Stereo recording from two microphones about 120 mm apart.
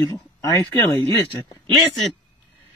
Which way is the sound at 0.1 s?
30° left (ahead or behind).